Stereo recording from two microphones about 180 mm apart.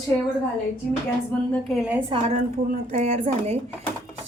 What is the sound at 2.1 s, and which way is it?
A woman's voice, 30° right (ahead or behind).